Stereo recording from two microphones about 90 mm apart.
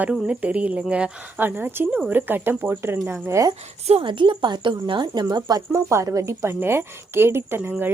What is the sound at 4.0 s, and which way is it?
Speech, 70° right (ahead or behind).